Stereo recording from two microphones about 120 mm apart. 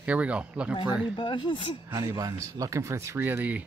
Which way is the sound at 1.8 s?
35° right (ahead or behind).